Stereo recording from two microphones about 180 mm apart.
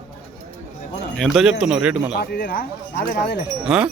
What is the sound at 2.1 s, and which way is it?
Speech, 60° left (ahead or behind).